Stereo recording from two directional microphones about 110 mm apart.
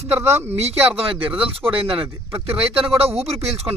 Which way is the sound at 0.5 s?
70° right (ahead or behind).